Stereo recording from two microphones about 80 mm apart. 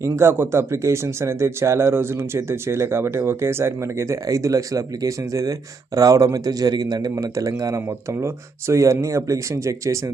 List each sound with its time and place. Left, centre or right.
0.0 s a man's voice: right
7.8 s a man's voice: right